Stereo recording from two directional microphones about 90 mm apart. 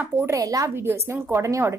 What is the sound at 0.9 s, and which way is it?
Speech, 25° right (ahead or behind).